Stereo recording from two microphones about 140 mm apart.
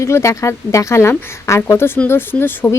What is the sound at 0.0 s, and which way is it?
Speech, 20° left (ahead or behind).